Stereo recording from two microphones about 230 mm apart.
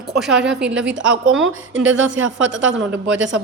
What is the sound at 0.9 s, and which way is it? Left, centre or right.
A woman's voice, right.